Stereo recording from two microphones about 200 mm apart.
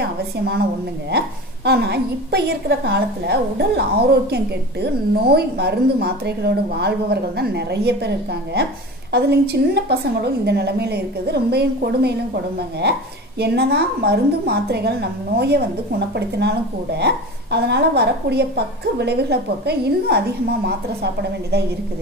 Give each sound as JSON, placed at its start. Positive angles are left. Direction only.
{"t": 1.1, "sound": "a woman's voice", "side_deg": -55}
{"t": 13.4, "sound": "a woman's voice", "side_deg": -55}